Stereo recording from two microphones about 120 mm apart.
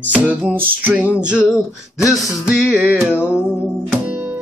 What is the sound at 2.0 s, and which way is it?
Music, 25° left (ahead or behind).